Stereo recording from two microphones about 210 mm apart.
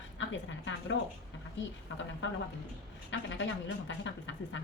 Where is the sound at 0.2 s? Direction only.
60° left (ahead or behind).